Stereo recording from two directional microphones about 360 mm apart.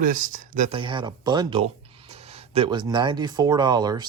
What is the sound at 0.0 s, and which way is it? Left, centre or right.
Speech, right.